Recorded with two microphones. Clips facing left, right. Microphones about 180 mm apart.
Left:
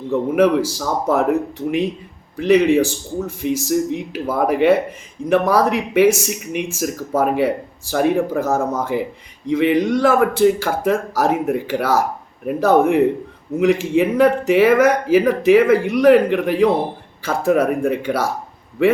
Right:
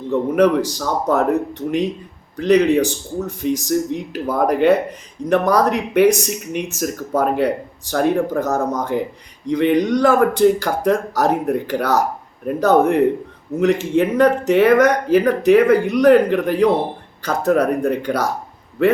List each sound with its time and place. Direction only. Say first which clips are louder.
0.1 s speech: even; 5° left (ahead or behind)